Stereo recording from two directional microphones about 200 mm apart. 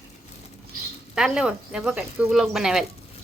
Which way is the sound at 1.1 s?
5° right (ahead or behind).